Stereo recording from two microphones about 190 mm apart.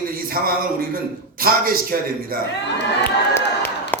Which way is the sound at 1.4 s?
50° right (ahead or behind).